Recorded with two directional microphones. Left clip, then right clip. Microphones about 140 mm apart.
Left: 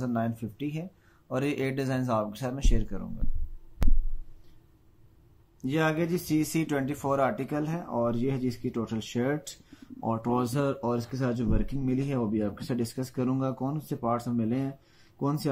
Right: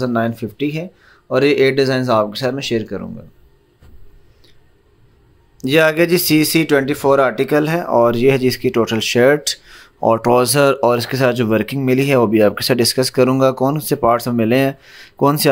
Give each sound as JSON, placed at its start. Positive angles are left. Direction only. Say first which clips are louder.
{"t": 0.0, "sound": "speech", "louder": "right 13 dB", "side_deg": -25}
{"t": 5.6, "sound": "speech", "louder": "right 15 dB", "side_deg": -40}
{"t": 6.5, "sound": "speech", "louder": "right 15 dB", "side_deg": -30}